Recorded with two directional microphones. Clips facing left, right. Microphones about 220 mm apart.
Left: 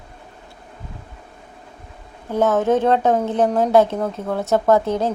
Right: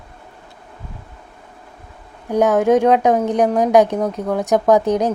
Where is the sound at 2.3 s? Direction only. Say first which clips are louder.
Right 3 dB; 15° right (ahead or behind).